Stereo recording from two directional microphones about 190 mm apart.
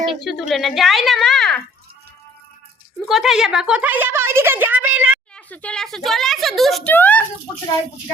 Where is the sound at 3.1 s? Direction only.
Centre (ahead or behind).